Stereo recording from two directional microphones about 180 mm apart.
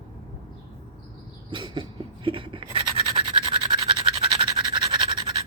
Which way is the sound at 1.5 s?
25° right (ahead or behind).